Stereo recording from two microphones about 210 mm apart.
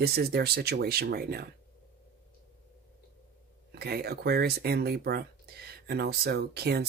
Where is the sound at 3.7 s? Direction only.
50° right (ahead or behind).